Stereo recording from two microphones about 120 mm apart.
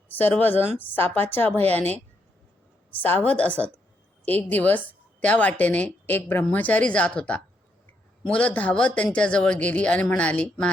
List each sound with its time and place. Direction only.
0.1 s speech: 15° left (ahead or behind)
3.0 s speech: 15° left (ahead or behind)